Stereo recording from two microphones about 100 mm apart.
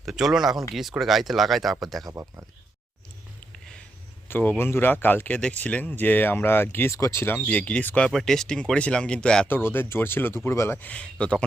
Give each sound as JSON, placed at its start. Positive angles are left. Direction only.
{"t": 0.0, "sound": "speech", "side_deg": -5}
{"t": 2.0, "sound": "speech", "side_deg": -25}
{"t": 4.3, "sound": "speech", "side_deg": 20}
{"t": 9.5, "sound": "speech", "side_deg": 20}